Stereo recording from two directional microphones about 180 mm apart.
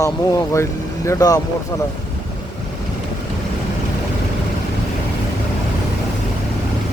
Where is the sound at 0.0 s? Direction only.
15° left (ahead or behind).